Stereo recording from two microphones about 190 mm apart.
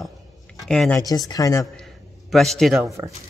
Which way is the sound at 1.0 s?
20° left (ahead or behind).